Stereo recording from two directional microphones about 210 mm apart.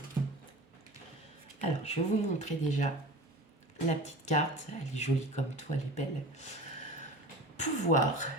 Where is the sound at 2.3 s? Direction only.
35° left (ahead or behind).